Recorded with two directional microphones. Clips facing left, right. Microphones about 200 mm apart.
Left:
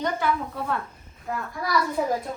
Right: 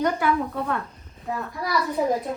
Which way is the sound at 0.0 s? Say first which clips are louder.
Right 3 dB; centre (ahead or behind).